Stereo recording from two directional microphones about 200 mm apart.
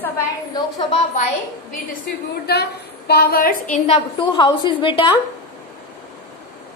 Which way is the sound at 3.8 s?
25° left (ahead or behind).